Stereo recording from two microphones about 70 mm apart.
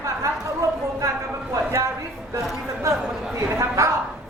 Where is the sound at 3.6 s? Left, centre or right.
Right.